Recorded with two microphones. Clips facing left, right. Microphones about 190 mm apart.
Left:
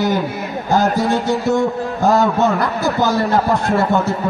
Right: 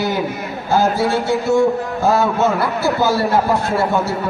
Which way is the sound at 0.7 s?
15° left (ahead or behind).